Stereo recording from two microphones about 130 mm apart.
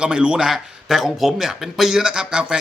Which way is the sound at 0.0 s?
10° right (ahead or behind).